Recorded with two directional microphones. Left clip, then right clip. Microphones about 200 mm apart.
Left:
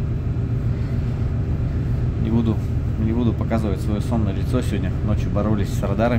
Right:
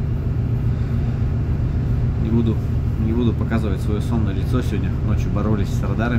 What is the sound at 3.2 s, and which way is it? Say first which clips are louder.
Speech: even; 15° left (ahead or behind).